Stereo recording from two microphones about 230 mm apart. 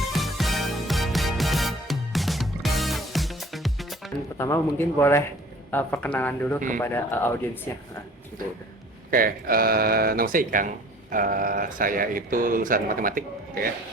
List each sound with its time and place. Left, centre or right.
0.0 s music: centre
4.4 s speech: centre
9.0 s speech: right